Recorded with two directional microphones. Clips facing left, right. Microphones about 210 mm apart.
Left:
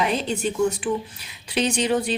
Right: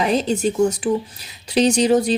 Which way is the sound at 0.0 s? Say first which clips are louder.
Right 5 dB; 40° right (ahead or behind).